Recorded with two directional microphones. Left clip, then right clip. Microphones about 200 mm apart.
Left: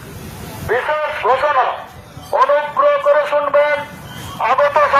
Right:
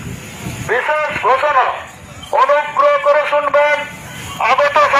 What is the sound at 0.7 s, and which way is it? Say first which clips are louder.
Radio: right 2 dB; centre (ahead or behind).